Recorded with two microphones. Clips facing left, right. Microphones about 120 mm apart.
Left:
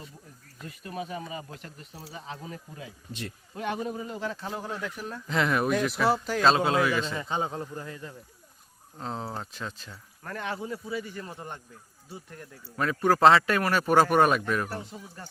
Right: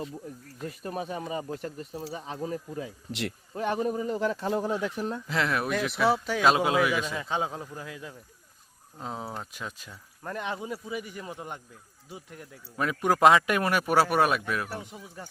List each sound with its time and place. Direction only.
0.9 s speech: 35° right (ahead or behind)
3.1 s speech: 80° right
3.8 s speech: 40° right (ahead or behind)
4.6 s speech: 20° right (ahead or behind)
5.3 s a man's voice: centre (ahead or behind)
6.4 s a man's voice: 10° right (ahead or behind)